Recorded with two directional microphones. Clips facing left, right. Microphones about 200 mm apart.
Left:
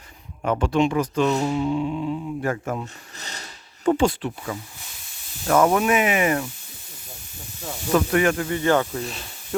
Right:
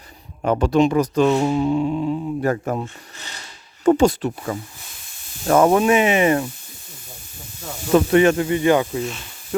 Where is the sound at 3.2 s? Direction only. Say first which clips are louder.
Left 2 dB; 35° left (ahead or behind).